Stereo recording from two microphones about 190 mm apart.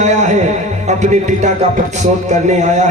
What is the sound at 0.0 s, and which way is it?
Music, 40° right (ahead or behind).